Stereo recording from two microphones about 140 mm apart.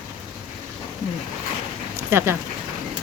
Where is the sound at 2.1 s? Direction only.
15° right (ahead or behind).